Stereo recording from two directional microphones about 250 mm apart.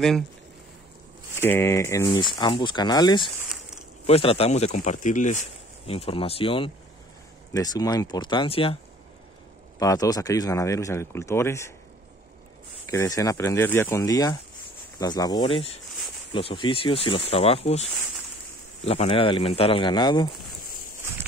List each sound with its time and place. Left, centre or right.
1.4 s speech: centre
3.3 s a sound: centre
4.0 s speech: left
9.8 s speech: centre
12.9 s speech: centre
18.9 s speech: left